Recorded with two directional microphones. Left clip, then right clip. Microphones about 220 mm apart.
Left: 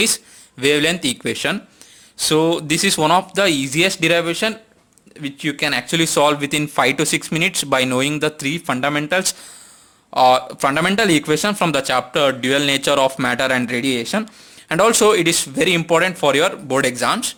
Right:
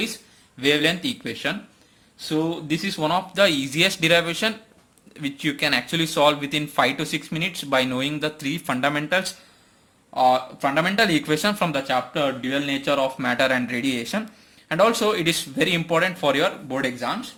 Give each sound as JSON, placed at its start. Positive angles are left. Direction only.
{"t": 0.6, "sound": "speech", "side_deg": 30}
{"t": 2.1, "sound": "a man's voice", "side_deg": 45}
{"t": 10.2, "sound": "a man's voice", "side_deg": 40}
{"t": 11.7, "sound": "a man's voice", "side_deg": 40}